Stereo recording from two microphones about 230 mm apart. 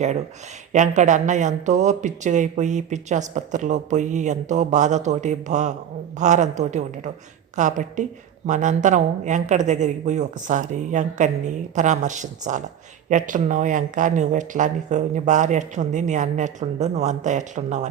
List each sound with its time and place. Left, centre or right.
0.7 s speech: right